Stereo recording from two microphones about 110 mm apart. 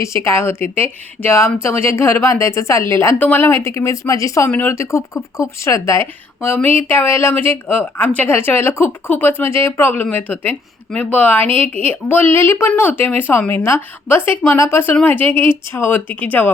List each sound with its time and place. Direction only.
0.0 s a woman's voice: 25° left (ahead or behind)
4.4 s a woman's voice: 15° left (ahead or behind)